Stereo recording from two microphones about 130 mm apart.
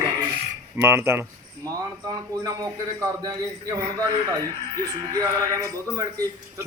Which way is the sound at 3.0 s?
30° right (ahead or behind).